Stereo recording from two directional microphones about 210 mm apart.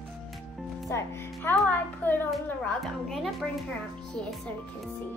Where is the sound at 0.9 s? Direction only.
10° left (ahead or behind).